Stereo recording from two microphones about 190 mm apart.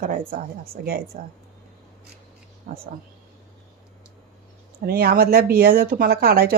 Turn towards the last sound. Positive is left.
turn(degrees=-50)  # may be behind; listen again after turning